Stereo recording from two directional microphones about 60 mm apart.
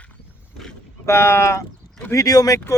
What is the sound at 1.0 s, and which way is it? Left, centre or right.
Speech, left.